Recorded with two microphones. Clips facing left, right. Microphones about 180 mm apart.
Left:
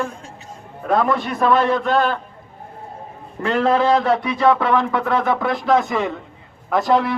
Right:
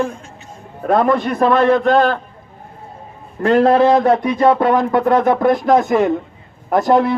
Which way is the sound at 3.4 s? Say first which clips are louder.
Right 6 dB; 45° right (ahead or behind).